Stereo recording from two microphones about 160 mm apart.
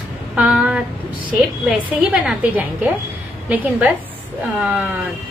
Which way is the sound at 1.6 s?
5° right (ahead or behind).